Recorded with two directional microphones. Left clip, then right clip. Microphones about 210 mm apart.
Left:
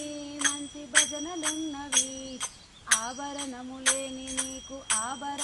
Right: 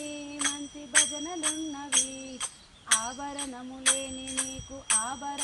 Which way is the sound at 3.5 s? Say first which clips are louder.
Even; 15° left (ahead or behind).